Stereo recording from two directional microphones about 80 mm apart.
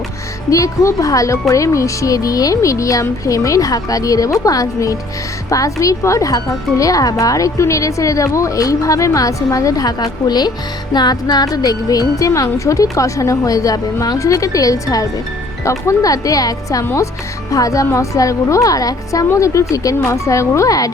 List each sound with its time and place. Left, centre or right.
0.5 s speech: left
10.9 s music: left
11.5 s speech: left
16.8 s speech: left